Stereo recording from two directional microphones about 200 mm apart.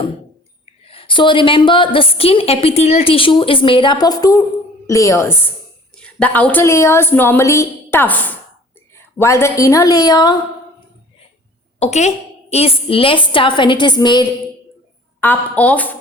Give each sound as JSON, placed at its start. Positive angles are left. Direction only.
{"t": 0.6, "sound": "a woman's voice", "side_deg": 30}
{"t": 11.8, "sound": "a woman's voice", "side_deg": 35}
{"t": 15.2, "sound": "a woman's voice", "side_deg": 10}